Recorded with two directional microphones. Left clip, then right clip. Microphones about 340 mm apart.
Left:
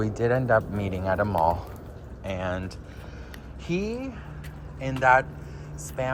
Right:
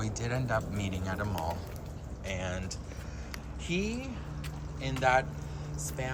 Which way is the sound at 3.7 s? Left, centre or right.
Left.